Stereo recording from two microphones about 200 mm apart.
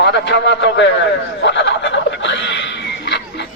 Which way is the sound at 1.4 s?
65° left (ahead or behind).